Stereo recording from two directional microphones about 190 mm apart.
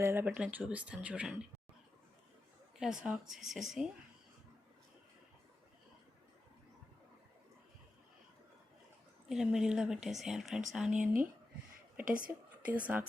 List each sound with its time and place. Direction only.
0.0 s speech: 15° right (ahead or behind)
2.7 s speech: 5° right (ahead or behind)
9.3 s speech: 5° right (ahead or behind)
11.0 s speech: 45° right (ahead or behind)
12.3 s a sound: 10° right (ahead or behind)